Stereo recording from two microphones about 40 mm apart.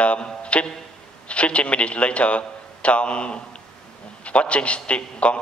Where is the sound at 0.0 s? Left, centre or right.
Left.